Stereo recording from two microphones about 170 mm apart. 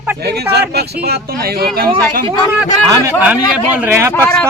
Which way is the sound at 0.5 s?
70° right (ahead or behind).